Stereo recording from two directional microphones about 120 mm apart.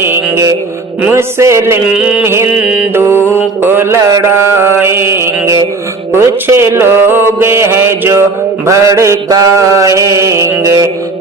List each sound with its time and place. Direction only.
0.0 s mantra: 20° right (ahead or behind)
3.2 s mantra: 15° left (ahead or behind)
3.6 s mantra: 20° right (ahead or behind)